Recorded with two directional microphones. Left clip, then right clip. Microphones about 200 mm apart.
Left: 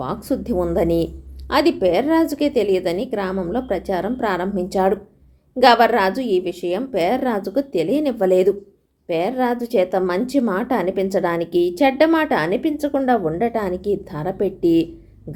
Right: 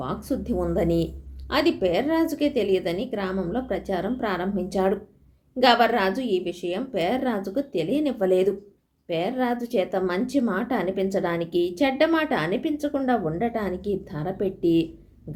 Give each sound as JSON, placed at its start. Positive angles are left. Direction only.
{"t": 0.0, "sound": "a woman's voice", "side_deg": 35}